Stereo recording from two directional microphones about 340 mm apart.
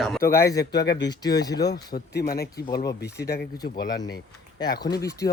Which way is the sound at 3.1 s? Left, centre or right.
Left.